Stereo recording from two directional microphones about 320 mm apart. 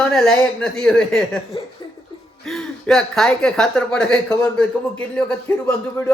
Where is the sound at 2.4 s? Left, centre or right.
Centre.